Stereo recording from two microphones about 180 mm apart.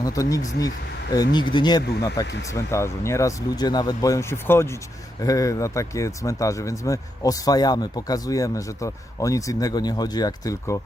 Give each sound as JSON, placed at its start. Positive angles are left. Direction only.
{"t": 0.0, "sound": "speech", "side_deg": 20}